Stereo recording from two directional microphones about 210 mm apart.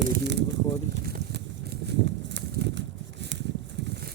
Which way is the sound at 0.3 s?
55° right (ahead or behind).